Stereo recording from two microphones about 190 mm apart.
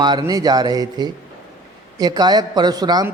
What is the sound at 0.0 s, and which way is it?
A man's voice, 20° right (ahead or behind).